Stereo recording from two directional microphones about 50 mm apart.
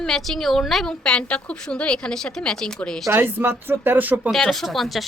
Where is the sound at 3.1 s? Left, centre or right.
Right.